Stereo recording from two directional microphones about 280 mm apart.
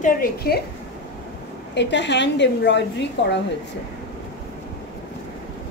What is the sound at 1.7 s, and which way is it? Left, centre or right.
A woman's voice, left.